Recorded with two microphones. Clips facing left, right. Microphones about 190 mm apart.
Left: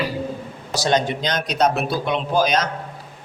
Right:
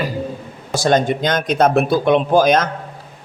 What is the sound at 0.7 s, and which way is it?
Speech, 50° right (ahead or behind).